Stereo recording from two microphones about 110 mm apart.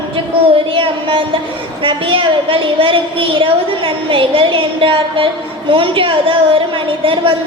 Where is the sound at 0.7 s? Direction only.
55° right (ahead or behind).